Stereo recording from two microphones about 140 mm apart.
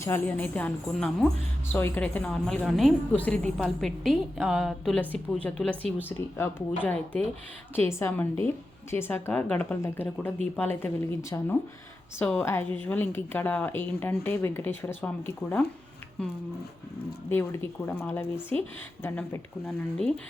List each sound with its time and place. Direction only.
0.0 s a woman's voice: 15° left (ahead or behind)
4.9 s a woman's voice: 10° left (ahead or behind)
17.2 s a woman's voice: 15° left (ahead or behind)